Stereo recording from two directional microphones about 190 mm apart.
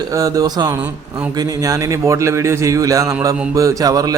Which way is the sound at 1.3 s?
20° right (ahead or behind).